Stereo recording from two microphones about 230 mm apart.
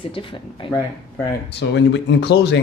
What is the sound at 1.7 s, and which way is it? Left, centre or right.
Speech, left.